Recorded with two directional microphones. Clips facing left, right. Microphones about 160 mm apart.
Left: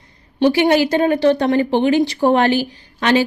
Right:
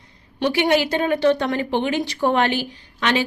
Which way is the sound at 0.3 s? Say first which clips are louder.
Left 5 dB; 35° left (ahead or behind).